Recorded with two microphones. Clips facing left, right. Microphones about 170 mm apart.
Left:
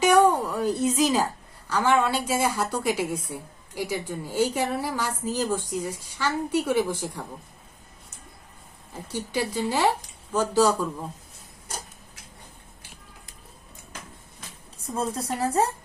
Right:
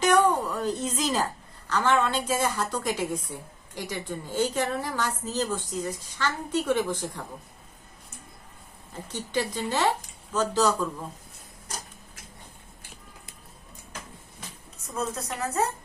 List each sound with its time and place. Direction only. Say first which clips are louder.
0.0 s a sound: left 3 dB; 10° left (ahead or behind)
1.7 s a woman's voice: left 2 dB; 10° left (ahead or behind)
9.0 s a woman's voice: left 1 dB; 10° left (ahead or behind)
14.8 s speech: left 3 dB; 30° left (ahead or behind)